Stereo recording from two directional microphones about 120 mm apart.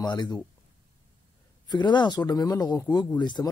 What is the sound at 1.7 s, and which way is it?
Speech, 40° left (ahead or behind).